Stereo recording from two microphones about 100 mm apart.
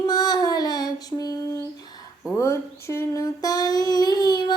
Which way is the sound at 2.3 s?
30° left (ahead or behind).